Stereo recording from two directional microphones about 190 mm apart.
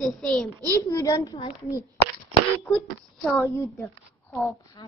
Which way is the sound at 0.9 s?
20° left (ahead or behind).